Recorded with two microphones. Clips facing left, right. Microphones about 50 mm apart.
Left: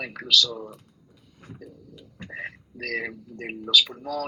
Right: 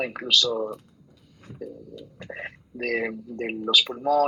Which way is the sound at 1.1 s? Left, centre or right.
Centre.